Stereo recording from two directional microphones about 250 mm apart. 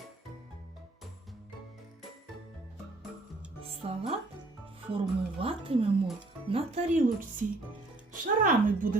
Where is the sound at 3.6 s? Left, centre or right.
Right.